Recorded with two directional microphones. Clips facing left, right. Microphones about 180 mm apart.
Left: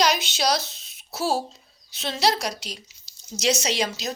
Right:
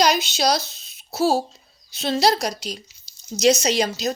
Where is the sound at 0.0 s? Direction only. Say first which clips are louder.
Right 3 dB; 35° right (ahead or behind).